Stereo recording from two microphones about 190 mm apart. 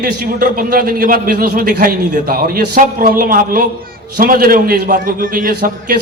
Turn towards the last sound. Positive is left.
turn(degrees=-55)  # may be behind; listen again after turning